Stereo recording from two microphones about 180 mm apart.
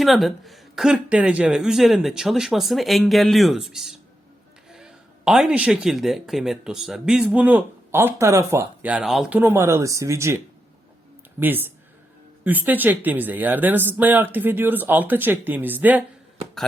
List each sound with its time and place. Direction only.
0.0 s speech: centre (ahead or behind)
9.4 s speech: 15° right (ahead or behind)